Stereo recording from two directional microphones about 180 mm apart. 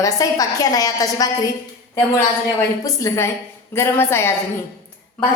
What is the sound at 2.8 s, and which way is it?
A woman's voice, 15° left (ahead or behind).